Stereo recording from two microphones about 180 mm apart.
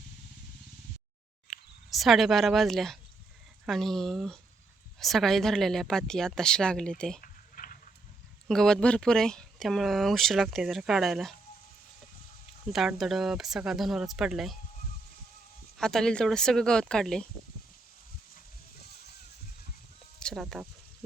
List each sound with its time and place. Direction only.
1.9 s speech: centre (ahead or behind)
7.2 s a sound: 50° left (ahead or behind)
8.4 s speech: 5° left (ahead or behind)
12.7 s speech: centre (ahead or behind)
15.8 s speech: 5° left (ahead or behind)
20.1 s speech: centre (ahead or behind)